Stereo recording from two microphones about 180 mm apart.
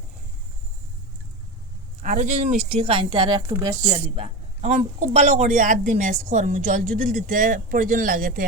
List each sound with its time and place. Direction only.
2.0 s speech: 45° right (ahead or behind); by 3.8 s 20° right (ahead or behind)
3.8 s speech: 35° right (ahead or behind)